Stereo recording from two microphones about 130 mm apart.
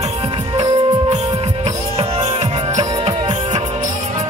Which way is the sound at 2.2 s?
55° right (ahead or behind).